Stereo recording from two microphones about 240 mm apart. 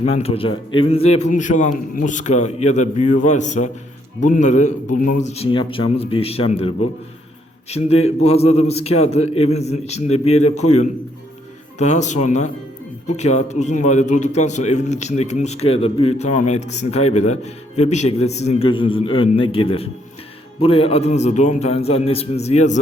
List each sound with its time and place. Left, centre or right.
0.0 s a man's voice: left
8.0 s a man's voice: left
11.8 s a man's voice: left